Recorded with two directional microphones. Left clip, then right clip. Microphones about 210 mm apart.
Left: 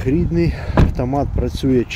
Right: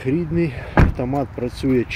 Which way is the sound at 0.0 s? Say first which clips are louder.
Left 3 dB; 20° left (ahead or behind).